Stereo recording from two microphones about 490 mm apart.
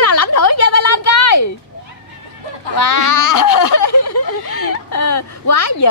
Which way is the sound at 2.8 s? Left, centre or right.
Left.